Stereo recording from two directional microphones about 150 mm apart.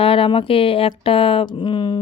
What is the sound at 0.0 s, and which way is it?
A woman's voice, 40° left (ahead or behind).